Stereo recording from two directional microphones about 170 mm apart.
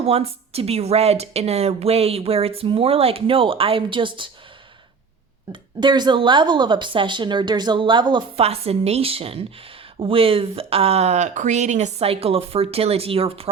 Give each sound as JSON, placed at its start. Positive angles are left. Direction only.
{"t": 0.0, "sound": "speech", "side_deg": -35}
{"t": 5.5, "sound": "speech", "side_deg": -25}